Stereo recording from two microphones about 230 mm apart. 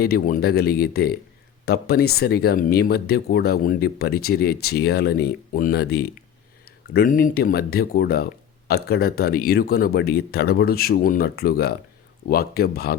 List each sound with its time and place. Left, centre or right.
0.0 s speech: left